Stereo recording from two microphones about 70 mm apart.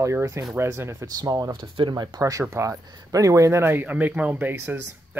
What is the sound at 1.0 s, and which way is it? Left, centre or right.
Speech, right.